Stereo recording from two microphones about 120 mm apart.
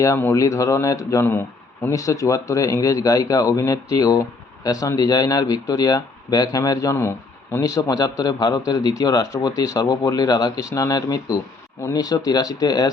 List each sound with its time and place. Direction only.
0.0 s a man's voice: 20° left (ahead or behind)